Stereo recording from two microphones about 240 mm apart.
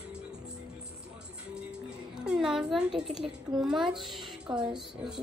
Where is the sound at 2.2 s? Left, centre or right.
Centre.